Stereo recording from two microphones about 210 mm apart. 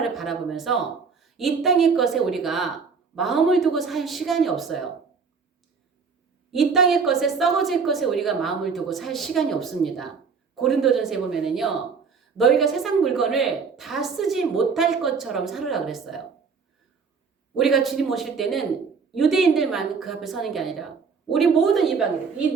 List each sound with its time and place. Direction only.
0.0 s speech: centre (ahead or behind)
6.5 s speech: centre (ahead or behind)
17.5 s speech: centre (ahead or behind)